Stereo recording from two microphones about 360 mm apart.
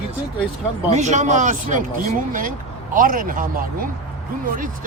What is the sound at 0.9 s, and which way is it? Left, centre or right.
Speech, centre.